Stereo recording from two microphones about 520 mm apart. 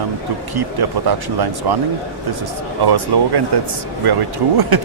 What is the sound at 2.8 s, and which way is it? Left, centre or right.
Speech, right.